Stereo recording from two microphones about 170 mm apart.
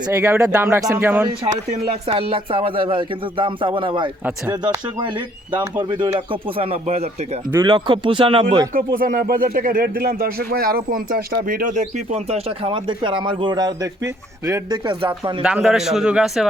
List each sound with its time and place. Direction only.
0.1 s speech: 15° right (ahead or behind)
1.5 s speech: 35° right (ahead or behind)
8.7 s speech: 55° right (ahead or behind); by 15.3 s 25° right (ahead or behind)
15.4 s a man's voice: 5° right (ahead or behind)